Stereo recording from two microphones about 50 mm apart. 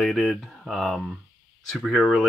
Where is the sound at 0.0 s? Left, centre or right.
Centre.